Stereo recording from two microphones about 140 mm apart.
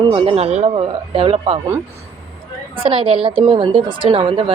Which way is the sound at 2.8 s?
40° right (ahead or behind).